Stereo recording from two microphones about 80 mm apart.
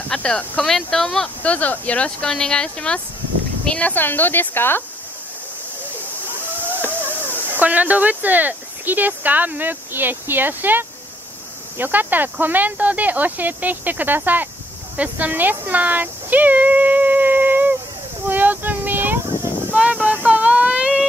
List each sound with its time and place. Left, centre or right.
0.1 s speech: centre
1.4 s speech: centre
6.2 s a sound: right
7.4 s speech: right
18.3 s female singing: right
19.7 s a sound: centre